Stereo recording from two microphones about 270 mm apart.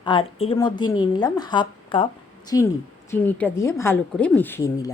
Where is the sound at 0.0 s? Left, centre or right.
Centre.